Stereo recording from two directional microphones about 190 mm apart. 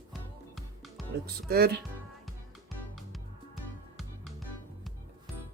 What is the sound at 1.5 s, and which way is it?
Speech, 55° right (ahead or behind).